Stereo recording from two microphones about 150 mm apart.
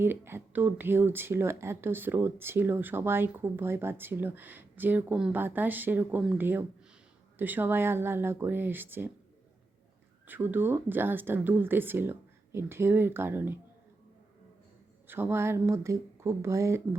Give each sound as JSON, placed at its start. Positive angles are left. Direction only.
{"t": 0.0, "sound": "speech", "side_deg": -15}
{"t": 10.2, "sound": "speech", "side_deg": -10}
{"t": 15.0, "sound": "speech", "side_deg": -15}